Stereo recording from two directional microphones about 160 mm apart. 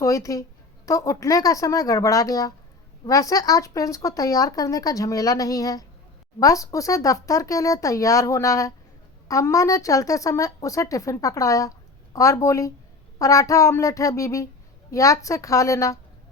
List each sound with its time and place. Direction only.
0.0 s speech: 20° left (ahead or behind)